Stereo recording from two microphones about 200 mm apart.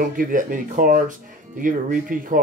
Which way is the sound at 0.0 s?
45° right (ahead or behind).